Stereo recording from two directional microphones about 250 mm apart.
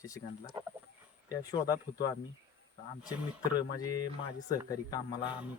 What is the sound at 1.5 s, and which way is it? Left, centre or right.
Speech, centre.